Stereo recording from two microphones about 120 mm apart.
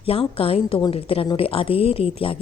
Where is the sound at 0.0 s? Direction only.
50° left (ahead or behind).